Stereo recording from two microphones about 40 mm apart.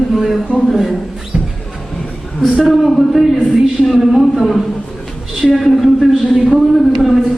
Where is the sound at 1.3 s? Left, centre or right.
Right.